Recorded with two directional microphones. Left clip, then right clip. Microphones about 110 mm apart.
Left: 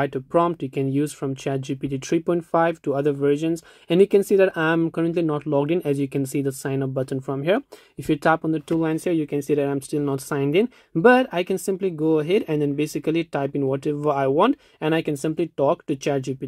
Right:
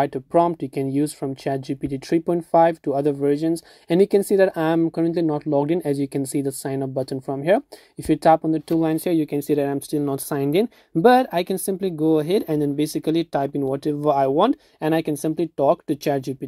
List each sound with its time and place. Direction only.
0.0 s speech: 25° right (ahead or behind)